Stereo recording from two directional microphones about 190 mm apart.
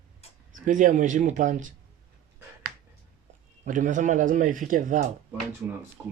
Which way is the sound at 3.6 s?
40° right (ahead or behind).